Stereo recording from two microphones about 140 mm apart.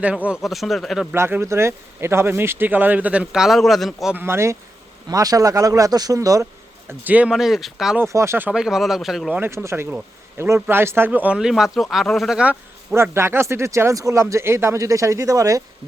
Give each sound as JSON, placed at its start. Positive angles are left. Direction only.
{"t": 0.3, "sound": "speech", "side_deg": 0}
{"t": 1.1, "sound": "speech", "side_deg": -20}
{"t": 4.2, "sound": "speech", "side_deg": -20}
{"t": 8.0, "sound": "speech", "side_deg": -20}
{"t": 9.3, "sound": "speech", "side_deg": -15}
{"t": 12.9, "sound": "speech", "side_deg": -20}